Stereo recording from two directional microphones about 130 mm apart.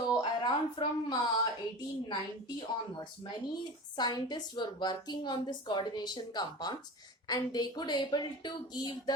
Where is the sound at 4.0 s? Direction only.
30° left (ahead or behind).